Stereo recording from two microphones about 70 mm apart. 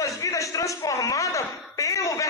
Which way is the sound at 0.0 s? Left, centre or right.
Left.